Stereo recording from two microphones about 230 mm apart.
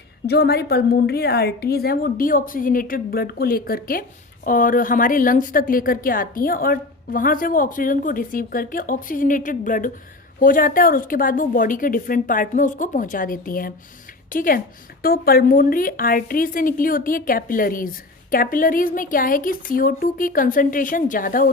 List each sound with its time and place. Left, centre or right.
0.3 s a woman's voice: left